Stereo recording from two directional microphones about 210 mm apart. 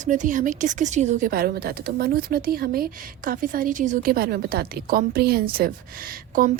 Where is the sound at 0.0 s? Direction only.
35° right (ahead or behind).